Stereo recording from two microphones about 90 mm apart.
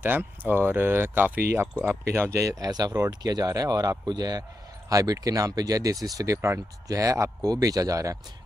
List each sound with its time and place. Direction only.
0.0 s a man's voice: 20° right (ahead or behind); by 8.2 s 40° right (ahead or behind)